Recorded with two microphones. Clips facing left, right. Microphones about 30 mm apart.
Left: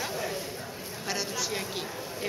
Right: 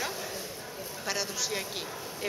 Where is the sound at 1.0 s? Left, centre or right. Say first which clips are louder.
Left 1 dB; centre.